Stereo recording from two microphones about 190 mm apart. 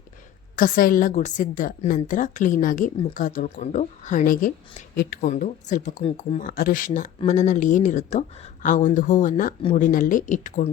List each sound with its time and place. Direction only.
0.5 s a woman's voice: 45° left (ahead or behind)
5.3 s speech: 40° left (ahead or behind)
6.4 s a woman's voice: 50° left (ahead or behind)